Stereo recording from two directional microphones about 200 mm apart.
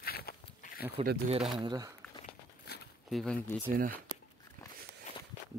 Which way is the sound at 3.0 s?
Centre (ahead or behind).